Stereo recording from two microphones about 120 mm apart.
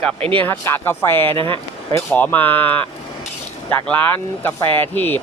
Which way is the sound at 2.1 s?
15° left (ahead or behind).